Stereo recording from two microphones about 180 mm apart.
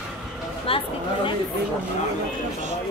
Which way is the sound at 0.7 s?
30° left (ahead or behind).